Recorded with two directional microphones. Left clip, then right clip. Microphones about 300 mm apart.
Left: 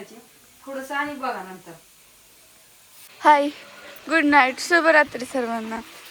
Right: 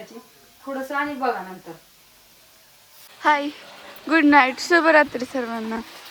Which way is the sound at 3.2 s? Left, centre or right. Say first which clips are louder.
Left 4 dB; centre.